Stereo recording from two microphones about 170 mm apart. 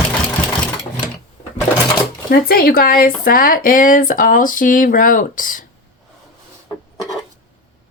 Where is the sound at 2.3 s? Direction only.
60° left (ahead or behind).